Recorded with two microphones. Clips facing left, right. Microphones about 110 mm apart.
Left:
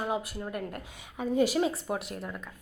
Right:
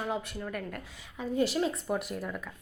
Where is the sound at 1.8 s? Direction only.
Centre (ahead or behind).